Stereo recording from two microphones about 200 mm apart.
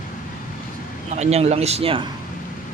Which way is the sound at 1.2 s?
35° right (ahead or behind).